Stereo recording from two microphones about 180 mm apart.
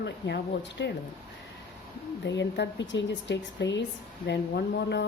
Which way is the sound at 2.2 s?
80° left.